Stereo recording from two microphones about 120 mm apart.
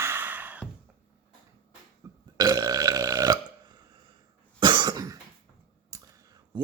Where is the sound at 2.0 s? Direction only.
30° right (ahead or behind).